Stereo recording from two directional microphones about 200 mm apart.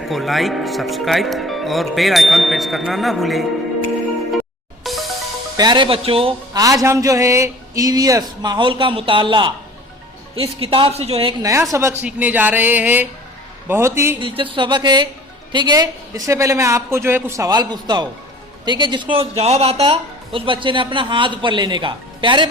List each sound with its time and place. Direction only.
0.0 s speech: centre (ahead or behind)
4.8 s music: centre (ahead or behind)
5.5 s a man's voice: 20° right (ahead or behind)
11.4 s a man's voice: 15° right (ahead or behind)
14.2 s a man's voice: 25° right (ahead or behind)